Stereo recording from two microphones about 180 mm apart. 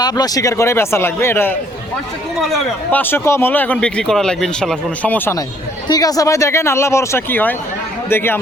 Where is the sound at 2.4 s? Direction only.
Centre (ahead or behind).